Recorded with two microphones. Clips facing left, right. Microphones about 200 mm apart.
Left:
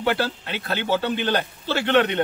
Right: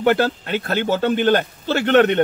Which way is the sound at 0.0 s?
50° right (ahead or behind).